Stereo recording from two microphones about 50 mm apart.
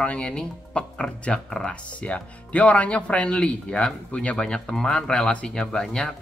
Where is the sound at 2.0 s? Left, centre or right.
Left.